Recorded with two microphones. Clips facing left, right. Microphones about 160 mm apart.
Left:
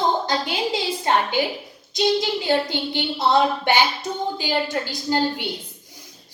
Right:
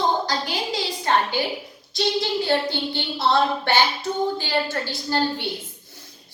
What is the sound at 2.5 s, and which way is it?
Child singing, 15° left (ahead or behind).